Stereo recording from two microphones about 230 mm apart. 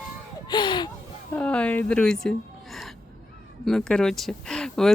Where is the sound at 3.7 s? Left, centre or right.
Centre.